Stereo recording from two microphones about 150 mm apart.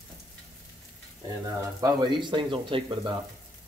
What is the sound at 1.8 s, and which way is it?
Speech, 30° right (ahead or behind).